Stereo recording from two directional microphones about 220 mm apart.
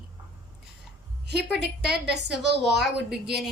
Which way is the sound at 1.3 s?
50° right (ahead or behind).